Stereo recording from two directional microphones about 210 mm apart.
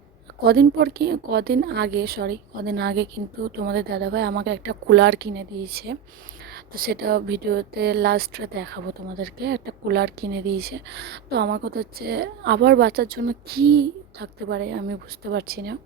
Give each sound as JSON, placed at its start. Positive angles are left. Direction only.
{"t": 0.4, "sound": "speech", "side_deg": -50}